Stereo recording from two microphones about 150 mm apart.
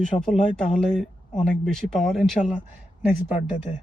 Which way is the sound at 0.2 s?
5° left (ahead or behind).